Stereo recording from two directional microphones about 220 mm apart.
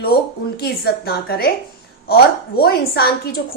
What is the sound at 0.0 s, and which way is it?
A woman's voice, 45° left (ahead or behind).